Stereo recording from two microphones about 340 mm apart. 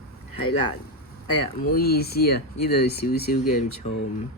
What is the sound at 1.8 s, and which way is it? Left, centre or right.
Speech, left.